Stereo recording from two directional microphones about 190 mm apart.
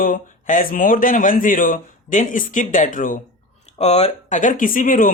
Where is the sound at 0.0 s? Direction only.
45° left (ahead or behind).